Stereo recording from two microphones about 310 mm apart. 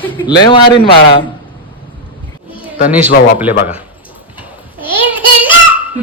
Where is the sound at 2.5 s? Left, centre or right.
Centre.